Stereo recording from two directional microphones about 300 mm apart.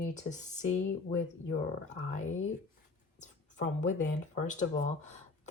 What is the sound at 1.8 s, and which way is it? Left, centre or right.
Speech, left.